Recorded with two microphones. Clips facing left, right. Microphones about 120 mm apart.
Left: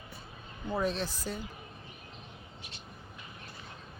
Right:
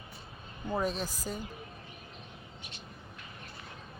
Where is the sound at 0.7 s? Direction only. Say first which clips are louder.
Left 1 dB; 10° right (ahead or behind).